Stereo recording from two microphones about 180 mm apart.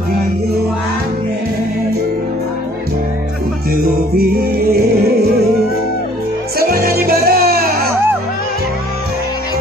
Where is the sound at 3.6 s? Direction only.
60° right (ahead or behind).